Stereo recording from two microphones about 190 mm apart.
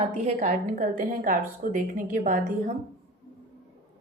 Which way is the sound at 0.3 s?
40° right (ahead or behind).